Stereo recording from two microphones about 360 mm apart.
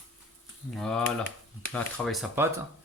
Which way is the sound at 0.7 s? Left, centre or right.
Centre.